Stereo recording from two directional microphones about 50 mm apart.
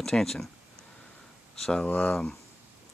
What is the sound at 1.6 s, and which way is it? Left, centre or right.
Speech, centre.